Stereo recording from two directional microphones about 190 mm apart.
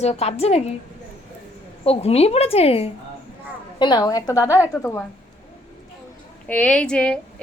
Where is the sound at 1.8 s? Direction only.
30° left (ahead or behind); by 5.0 s 10° left (ahead or behind).